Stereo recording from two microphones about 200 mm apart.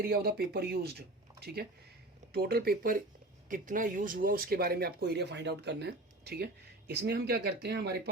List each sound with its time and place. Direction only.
0.0 s speech: 50° right (ahead or behind)
2.3 s speech: 50° right (ahead or behind)